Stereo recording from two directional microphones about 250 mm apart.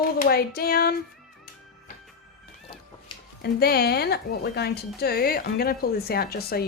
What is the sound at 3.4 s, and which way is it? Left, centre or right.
Speech, left.